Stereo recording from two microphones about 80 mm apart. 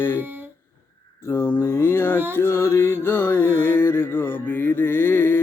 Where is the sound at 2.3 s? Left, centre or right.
Left.